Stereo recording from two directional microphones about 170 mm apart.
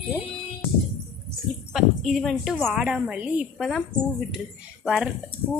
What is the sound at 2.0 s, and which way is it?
Speech, centre (ahead or behind).